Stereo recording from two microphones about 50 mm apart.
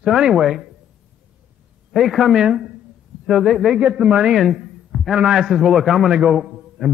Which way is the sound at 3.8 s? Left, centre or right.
Right.